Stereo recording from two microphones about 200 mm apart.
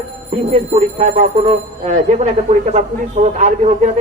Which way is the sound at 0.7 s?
35° right (ahead or behind).